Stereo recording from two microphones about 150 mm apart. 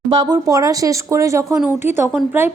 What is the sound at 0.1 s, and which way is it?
A woman's voice, 30° right (ahead or behind).